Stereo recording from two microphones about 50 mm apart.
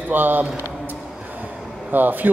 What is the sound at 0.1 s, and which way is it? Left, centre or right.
Speech, right.